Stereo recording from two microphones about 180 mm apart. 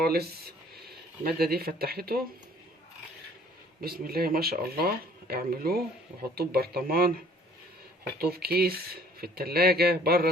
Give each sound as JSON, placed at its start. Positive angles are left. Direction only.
{"t": 0.0, "sound": "speech", "side_deg": -60}
{"t": 3.8, "sound": "speech", "side_deg": -55}
{"t": 8.2, "sound": "speech", "side_deg": -60}